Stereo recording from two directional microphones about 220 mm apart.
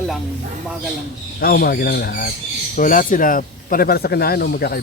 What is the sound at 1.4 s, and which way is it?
Speech, 45° left (ahead or behind).